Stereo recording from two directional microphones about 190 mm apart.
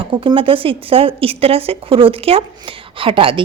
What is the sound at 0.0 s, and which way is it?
A woman's voice, 25° right (ahead or behind).